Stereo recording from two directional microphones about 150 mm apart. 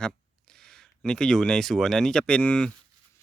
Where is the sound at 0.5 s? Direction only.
5° left (ahead or behind).